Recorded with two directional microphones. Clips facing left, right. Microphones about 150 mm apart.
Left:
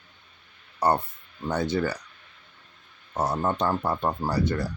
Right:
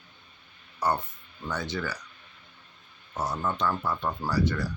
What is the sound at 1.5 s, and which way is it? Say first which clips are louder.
Speech: left 7 dB; 55° left (ahead or behind).